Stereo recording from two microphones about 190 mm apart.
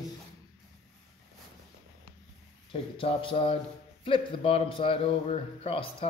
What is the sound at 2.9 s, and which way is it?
A man's voice, 30° left (ahead or behind).